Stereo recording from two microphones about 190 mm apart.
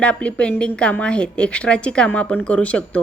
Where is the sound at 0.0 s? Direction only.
5° left (ahead or behind).